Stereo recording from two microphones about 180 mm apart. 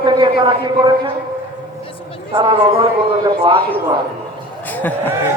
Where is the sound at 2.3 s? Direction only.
25° right (ahead or behind).